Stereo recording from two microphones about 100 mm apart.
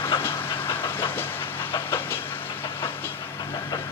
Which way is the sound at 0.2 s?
20° left (ahead or behind).